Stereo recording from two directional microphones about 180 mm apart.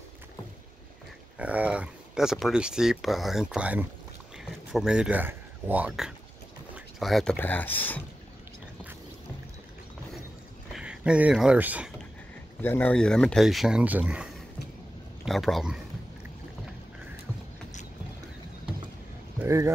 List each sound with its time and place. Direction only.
1.4 s speech: 5° right (ahead or behind); by 8.0 s 10° left (ahead or behind)
10.7 s speech: 5° right (ahead or behind)
12.6 s speech: 10° left (ahead or behind)
19.3 s speech: 15° right (ahead or behind)